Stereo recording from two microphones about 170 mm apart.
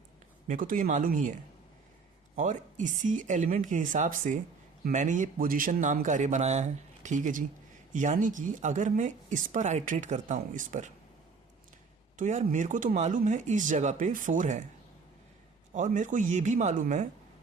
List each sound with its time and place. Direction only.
0.4 s speech: 50° right (ahead or behind)
2.3 s speech: 45° right (ahead or behind)
12.1 s speech: 45° right (ahead or behind)
15.7 s speech: 45° right (ahead or behind)